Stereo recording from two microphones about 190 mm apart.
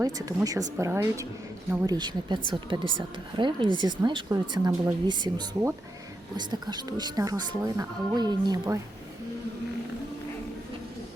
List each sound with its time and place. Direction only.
0.0 s a woman's voice: 20° right (ahead or behind)